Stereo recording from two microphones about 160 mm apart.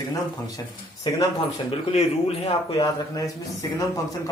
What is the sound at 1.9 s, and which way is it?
Speech, 40° left (ahead or behind).